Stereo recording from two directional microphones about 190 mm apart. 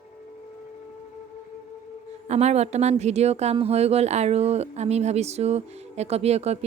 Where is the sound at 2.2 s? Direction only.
35° right (ahead or behind).